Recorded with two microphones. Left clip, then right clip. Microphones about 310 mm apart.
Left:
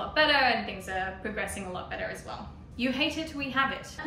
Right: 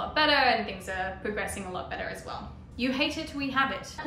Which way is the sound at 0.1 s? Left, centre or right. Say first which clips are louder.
Even; centre.